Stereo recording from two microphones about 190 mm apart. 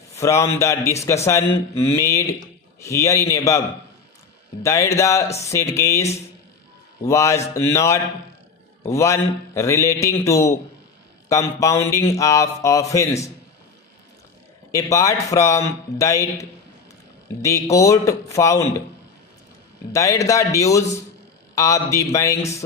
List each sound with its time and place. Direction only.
0.2 s a man's voice: 15° left (ahead or behind)
4.6 s a man's voice: 15° left (ahead or behind)
7.1 s a man's voice: 15° left (ahead or behind)
14.7 s a man's voice: 15° left (ahead or behind)
19.9 s a man's voice: 15° left (ahead or behind)